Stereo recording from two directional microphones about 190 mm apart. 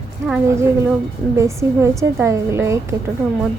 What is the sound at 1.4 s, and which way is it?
A woman's voice, 15° right (ahead or behind).